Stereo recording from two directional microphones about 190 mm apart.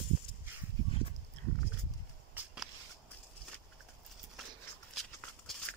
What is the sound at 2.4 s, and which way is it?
Walk, 10° right (ahead or behind).